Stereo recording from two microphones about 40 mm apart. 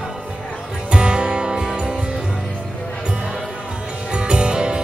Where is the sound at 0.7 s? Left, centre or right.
Right.